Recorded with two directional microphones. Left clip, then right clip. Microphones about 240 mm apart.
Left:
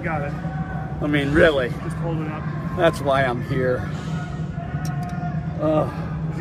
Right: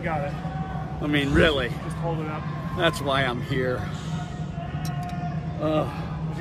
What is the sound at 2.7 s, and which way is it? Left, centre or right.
Speech, centre.